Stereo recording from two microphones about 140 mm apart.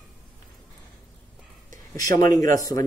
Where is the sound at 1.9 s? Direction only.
25° left (ahead or behind).